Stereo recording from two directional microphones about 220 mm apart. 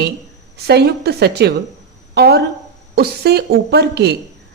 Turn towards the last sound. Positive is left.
turn(degrees=-50)  # may be behind; listen again after turning